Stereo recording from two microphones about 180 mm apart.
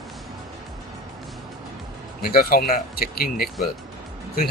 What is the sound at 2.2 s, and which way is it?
Speech, 55° left (ahead or behind).